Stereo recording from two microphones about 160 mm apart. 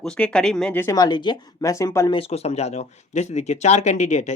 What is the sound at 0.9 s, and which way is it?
A woman's voice, 25° left (ahead or behind).